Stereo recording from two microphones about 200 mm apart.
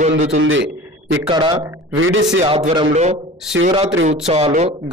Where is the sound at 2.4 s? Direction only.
25° right (ahead or behind).